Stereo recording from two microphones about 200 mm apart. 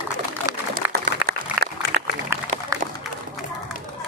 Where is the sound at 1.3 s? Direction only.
55° right (ahead or behind).